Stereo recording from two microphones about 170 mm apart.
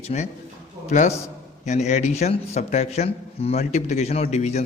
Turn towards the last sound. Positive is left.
turn(degrees=40)  # may be behind; listen again after turning